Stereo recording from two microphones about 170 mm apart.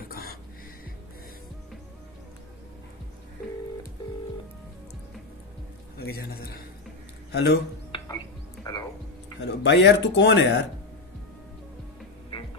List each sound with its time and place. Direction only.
0.1 s music: 60° left (ahead or behind)
5.9 s a man's voice: 65° left (ahead or behind)
7.3 s speech: 80° left
7.9 s music: 30° left (ahead or behind)
9.4 s speech: 90° left